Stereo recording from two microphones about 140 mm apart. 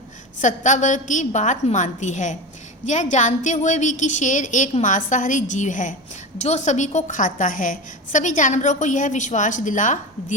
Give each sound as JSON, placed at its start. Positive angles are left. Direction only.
{"t": 0.4, "sound": "a woman's voice", "side_deg": 60}